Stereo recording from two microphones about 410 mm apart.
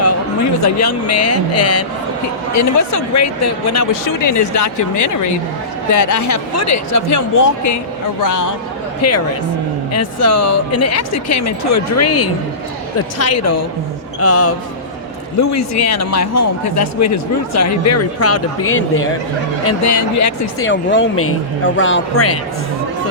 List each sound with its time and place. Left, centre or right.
0.6 s speech: left
9.0 s speech: left
19.6 s speech: left
20.7 s speech: left